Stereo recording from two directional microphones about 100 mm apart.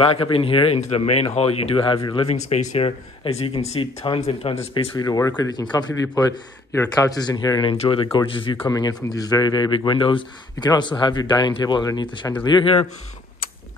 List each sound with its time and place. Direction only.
0.0 s speech: 70° left (ahead or behind)
2.1 s speech: 90° left; by 4.8 s 70° left (ahead or behind)
4.9 s speech: 35° left (ahead or behind)
7.7 s speech: 75° left (ahead or behind); by 8.5 s 60° left (ahead or behind)
8.6 s speech: 40° left (ahead or behind)